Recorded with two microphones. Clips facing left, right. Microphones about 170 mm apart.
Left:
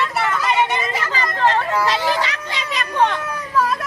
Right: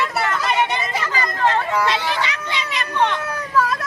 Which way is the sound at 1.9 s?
35° left (ahead or behind).